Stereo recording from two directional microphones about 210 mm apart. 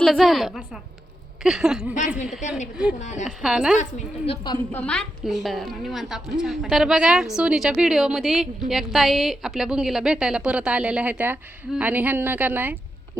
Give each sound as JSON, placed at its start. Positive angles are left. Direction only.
{"t": 0.0, "sound": "a woman's voice", "side_deg": 0}
{"t": 2.0, "sound": "a woman's voice", "side_deg": 35}
{"t": 3.2, "sound": "a woman's voice", "side_deg": 0}